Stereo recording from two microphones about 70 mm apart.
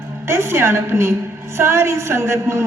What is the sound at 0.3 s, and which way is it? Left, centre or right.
A woman's voice, right.